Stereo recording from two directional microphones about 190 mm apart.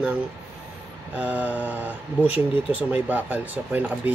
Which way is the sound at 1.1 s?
5° right (ahead or behind).